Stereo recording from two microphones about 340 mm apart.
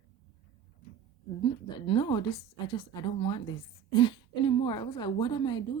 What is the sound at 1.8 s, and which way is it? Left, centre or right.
A woman's voice, centre.